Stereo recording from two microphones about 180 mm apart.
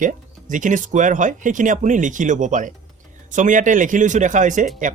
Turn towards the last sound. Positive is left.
turn(degrees=-45)  # may be behind; listen again after turning